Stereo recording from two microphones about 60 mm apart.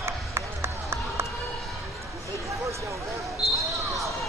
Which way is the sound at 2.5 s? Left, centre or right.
Right.